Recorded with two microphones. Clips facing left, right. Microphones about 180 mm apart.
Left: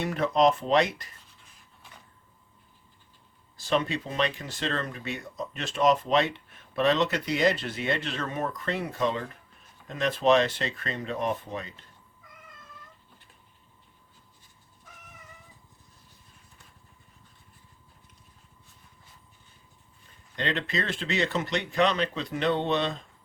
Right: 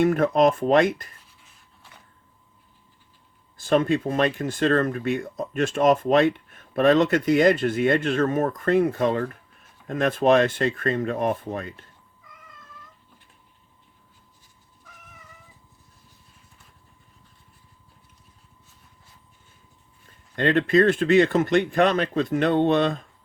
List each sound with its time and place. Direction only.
0.0 s speech: 50° right (ahead or behind)
3.6 s speech: 50° right (ahead or behind)
20.3 s speech: 50° right (ahead or behind)